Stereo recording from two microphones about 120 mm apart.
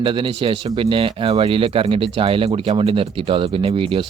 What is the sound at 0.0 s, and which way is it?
Speech, 45° right (ahead or behind).